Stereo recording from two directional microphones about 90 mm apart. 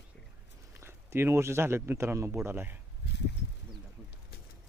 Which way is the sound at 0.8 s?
30° right (ahead or behind).